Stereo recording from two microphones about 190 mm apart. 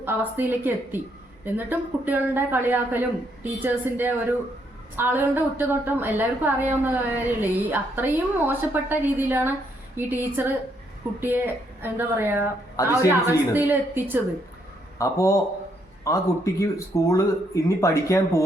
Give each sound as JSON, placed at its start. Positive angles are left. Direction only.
{"t": 0.0, "sound": "a woman's voice", "side_deg": -10}
{"t": 12.7, "sound": "speech", "side_deg": 15}
{"t": 13.1, "sound": "a woman's voice", "side_deg": -10}
{"t": 14.9, "sound": "a man's voice", "side_deg": 15}